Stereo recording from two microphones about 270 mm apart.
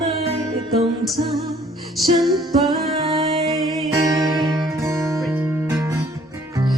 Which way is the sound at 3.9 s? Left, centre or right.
Centre.